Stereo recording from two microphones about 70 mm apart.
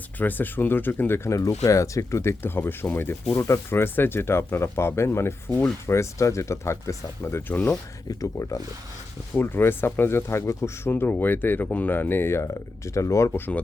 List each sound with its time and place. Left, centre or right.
0.2 s speech: left
3.3 s speech: left
8.2 s speech: left
9.4 s speech: left
10.9 s speech: left
13.3 s speech: left